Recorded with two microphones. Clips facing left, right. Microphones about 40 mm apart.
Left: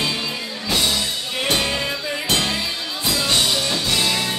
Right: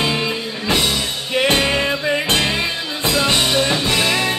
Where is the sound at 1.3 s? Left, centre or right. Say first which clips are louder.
Right 6 dB; right.